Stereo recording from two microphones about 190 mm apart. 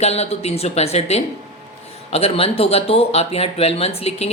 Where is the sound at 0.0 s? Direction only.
35° left (ahead or behind).